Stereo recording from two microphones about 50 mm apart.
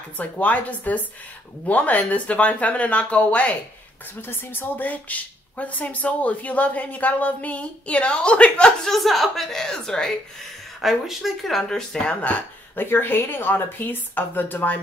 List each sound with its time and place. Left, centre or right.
0.2 s speech: left
4.2 s speech: left
4.7 s speech: left
8.8 s a woman's voice: centre
10.8 s speech: centre
12.7 s speech: left